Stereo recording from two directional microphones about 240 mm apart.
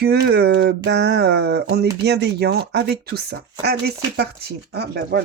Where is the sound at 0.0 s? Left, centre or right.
Right.